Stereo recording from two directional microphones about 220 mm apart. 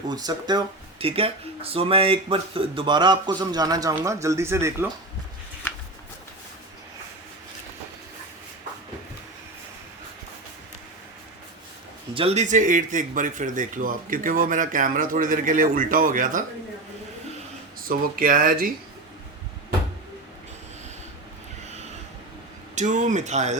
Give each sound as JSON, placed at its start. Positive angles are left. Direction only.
{"t": 0.1, "sound": "speech", "side_deg": -20}
{"t": 12.1, "sound": "speech", "side_deg": -30}
{"t": 17.8, "sound": "speech", "side_deg": -40}
{"t": 22.7, "sound": "speech", "side_deg": -35}